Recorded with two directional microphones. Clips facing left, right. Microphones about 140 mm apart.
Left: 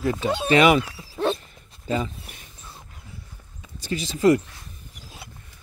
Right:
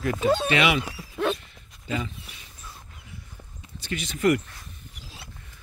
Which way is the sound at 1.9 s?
35° left (ahead or behind).